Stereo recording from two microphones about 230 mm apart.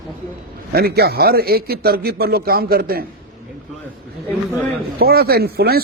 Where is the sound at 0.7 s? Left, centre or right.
Right.